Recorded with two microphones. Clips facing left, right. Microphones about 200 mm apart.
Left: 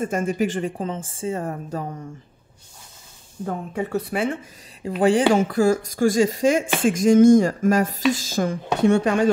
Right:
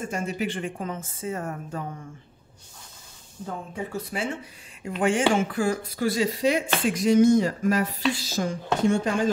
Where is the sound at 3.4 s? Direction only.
60° left (ahead or behind).